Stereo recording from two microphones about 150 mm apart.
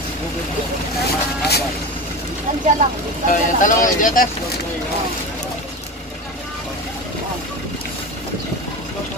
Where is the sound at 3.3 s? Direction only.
60° left (ahead or behind).